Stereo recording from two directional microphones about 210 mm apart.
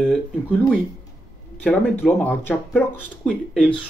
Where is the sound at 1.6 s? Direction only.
10° left (ahead or behind).